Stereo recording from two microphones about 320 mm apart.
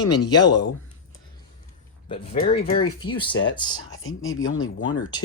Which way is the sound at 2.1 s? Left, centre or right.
Centre.